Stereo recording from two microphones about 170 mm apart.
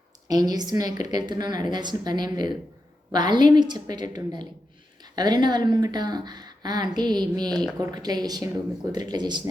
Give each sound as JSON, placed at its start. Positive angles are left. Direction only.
{"t": 0.3, "sound": "speech", "side_deg": -25}